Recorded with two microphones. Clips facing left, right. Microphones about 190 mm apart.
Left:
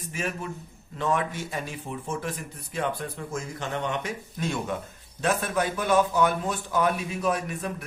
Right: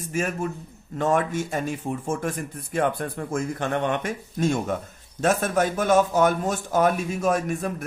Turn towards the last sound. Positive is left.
turn(degrees=-45)  # may be behind; listen again after turning